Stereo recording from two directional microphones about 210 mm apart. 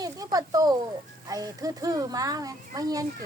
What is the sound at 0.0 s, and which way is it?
A child's voice, 15° right (ahead or behind).